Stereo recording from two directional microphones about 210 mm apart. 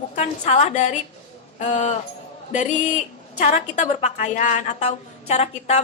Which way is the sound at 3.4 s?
35° left (ahead or behind).